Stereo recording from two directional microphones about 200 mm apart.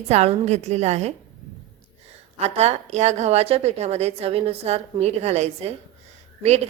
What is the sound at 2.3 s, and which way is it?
A woman's voice, 30° right (ahead or behind).